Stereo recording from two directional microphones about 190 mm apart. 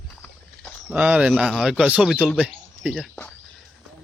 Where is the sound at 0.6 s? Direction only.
5° right (ahead or behind).